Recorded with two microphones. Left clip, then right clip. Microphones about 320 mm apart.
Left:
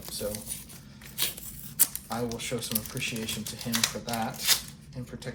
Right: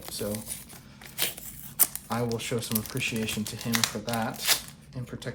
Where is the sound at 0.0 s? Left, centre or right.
Right.